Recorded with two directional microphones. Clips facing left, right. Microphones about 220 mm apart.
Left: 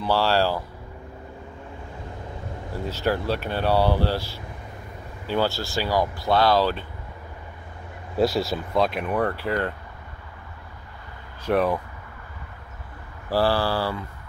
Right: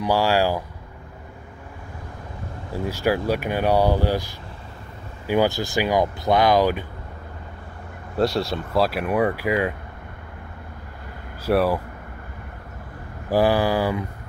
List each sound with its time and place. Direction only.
0.0 s speech: 15° right (ahead or behind)
2.7 s speech: 10° right (ahead or behind)
8.2 s speech: centre (ahead or behind)
11.4 s speech: 5° right (ahead or behind)
13.3 s speech: 15° right (ahead or behind)